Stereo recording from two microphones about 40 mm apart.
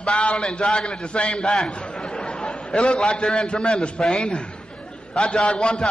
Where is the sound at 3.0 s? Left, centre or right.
Centre.